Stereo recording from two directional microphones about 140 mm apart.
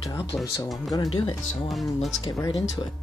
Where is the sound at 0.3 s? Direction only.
15° left (ahead or behind).